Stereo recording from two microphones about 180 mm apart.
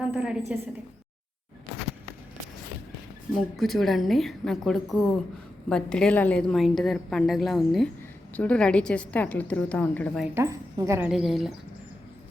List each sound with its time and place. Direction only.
0.0 s a woman's voice: 5° right (ahead or behind)
3.3 s a woman's voice: centre (ahead or behind)
10.3 s a woman's voice: 15° right (ahead or behind)
11.1 s a woman's voice: centre (ahead or behind)